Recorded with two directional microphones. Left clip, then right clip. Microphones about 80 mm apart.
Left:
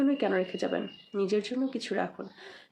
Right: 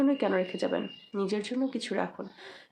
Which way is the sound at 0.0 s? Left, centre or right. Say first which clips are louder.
Right 1 dB; right.